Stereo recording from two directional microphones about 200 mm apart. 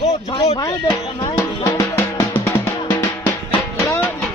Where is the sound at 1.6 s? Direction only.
15° left (ahead or behind).